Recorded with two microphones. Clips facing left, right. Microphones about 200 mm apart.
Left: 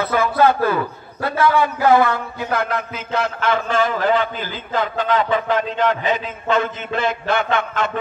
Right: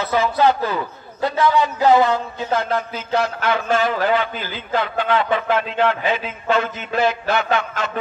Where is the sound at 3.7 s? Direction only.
45° left (ahead or behind).